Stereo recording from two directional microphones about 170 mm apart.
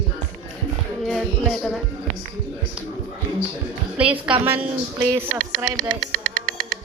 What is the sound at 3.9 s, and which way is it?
A woman's voice, 5° right (ahead or behind).